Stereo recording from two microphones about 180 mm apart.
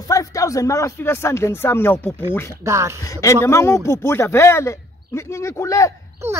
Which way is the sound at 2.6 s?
15° right (ahead or behind).